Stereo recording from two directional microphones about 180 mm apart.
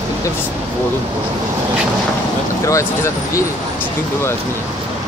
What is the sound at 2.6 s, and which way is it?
Speech, 15° left (ahead or behind).